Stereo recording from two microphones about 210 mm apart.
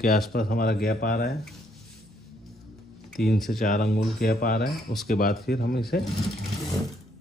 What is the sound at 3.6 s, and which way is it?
Speech, 45° left (ahead or behind).